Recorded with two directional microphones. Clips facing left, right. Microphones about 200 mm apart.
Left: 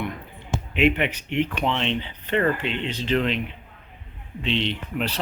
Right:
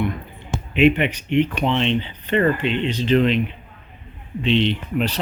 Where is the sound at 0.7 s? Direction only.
Centre (ahead or behind).